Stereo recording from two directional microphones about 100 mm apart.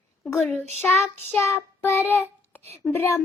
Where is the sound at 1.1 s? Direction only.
25° left (ahead or behind).